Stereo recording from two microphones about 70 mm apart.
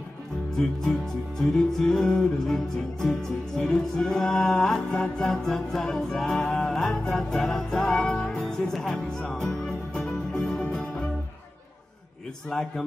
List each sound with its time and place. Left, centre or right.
1.4 s music: centre
12.4 s music: centre